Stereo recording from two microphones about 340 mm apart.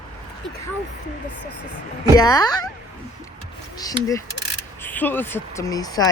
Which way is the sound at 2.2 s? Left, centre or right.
Centre.